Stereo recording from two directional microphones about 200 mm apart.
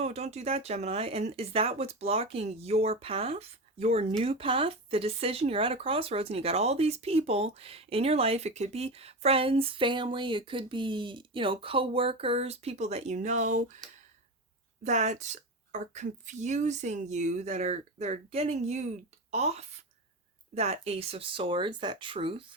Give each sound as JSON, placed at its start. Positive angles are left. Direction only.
{"t": 0.0, "sound": "speech", "side_deg": -30}
{"t": 14.8, "sound": "speech", "side_deg": -35}